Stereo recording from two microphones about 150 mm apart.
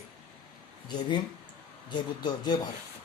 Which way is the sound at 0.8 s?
30° left (ahead or behind).